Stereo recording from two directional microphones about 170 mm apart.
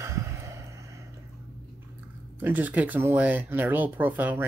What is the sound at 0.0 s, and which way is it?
Vehicle, 15° right (ahead or behind).